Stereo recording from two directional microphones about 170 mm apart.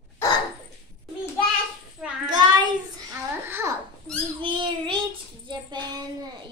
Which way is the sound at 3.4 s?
15° right (ahead or behind).